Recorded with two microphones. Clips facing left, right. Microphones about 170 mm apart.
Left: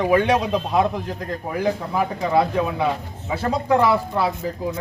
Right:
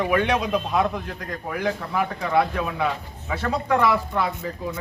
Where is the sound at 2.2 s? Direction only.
20° left (ahead or behind).